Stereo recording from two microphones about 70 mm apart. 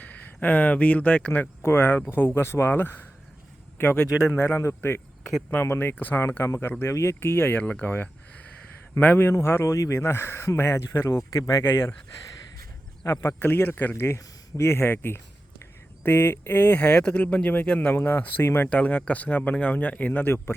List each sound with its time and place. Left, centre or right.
0.0 s speech: left
4.3 s speech: left
9.7 s speech: left
10.1 s speech: left
11.3 s speech: left
11.6 s speech: left
13.0 s speech: left
13.4 s speech: left
18.7 s speech: centre